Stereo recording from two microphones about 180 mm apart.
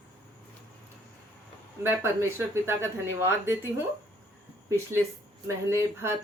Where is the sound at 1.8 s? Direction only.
15° right (ahead or behind).